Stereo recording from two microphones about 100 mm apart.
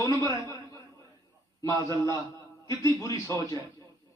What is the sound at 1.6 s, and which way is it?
Speech, 35° left (ahead or behind).